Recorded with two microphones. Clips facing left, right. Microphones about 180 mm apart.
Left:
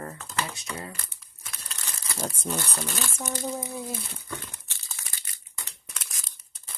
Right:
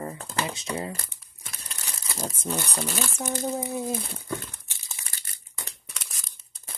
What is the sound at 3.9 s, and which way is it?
Speech, 45° right (ahead or behind).